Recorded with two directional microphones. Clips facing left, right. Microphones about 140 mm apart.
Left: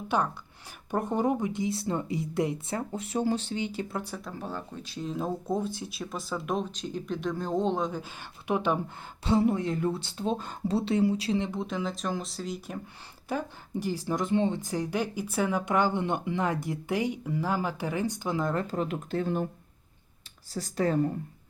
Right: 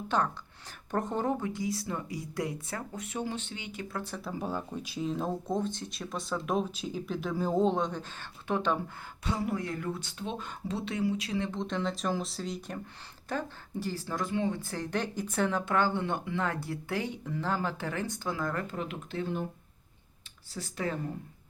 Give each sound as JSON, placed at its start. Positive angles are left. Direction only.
{"t": 0.1, "sound": "a woman's voice", "side_deg": 10}
{"t": 3.9, "sound": "speech", "side_deg": 10}
{"t": 4.2, "sound": "speech", "side_deg": -10}
{"t": 5.0, "sound": "speech", "side_deg": 0}
{"t": 8.2, "sound": "speech", "side_deg": 15}
{"t": 9.2, "sound": "a woman's voice", "side_deg": 25}
{"t": 11.3, "sound": "a woman's voice", "side_deg": 20}
{"t": 11.6, "sound": "speech", "side_deg": 5}
{"t": 13.2, "sound": "speech", "side_deg": 15}
{"t": 14.6, "sound": "speech", "side_deg": 15}
{"t": 18.7, "sound": "speech", "side_deg": 40}
{"t": 20.5, "sound": "speech", "side_deg": 40}